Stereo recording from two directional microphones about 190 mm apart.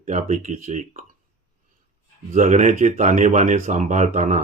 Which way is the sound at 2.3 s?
40° right (ahead or behind).